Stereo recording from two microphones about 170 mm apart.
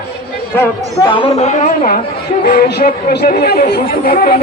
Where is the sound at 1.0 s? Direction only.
30° left (ahead or behind); by 2.0 s 50° left (ahead or behind).